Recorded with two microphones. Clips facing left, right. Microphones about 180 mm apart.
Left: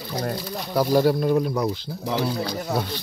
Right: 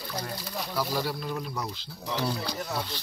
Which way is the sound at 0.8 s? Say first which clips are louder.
Left 12 dB; 50° left (ahead or behind).